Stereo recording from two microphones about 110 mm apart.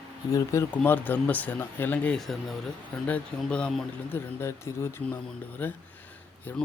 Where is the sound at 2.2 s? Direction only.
Centre (ahead or behind).